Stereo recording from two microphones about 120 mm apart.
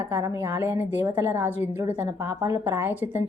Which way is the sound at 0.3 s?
20° right (ahead or behind).